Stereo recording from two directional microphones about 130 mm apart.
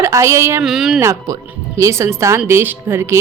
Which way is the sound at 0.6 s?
5° right (ahead or behind).